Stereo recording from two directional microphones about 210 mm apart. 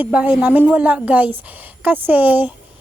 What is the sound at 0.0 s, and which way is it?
A woman's voice, 5° right (ahead or behind).